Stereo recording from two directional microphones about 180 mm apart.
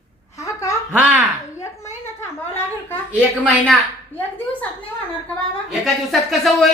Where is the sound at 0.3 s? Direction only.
15° left (ahead or behind).